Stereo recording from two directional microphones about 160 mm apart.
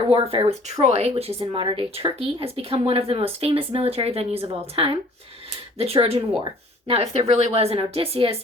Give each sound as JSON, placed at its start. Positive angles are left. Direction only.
{"t": 0.1, "sound": "speech", "side_deg": -35}